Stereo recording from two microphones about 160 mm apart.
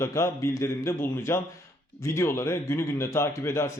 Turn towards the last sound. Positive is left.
turn(degrees=15)  # may be behind; listen again after turning